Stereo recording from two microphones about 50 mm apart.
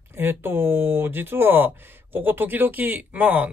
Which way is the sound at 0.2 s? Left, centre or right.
Right.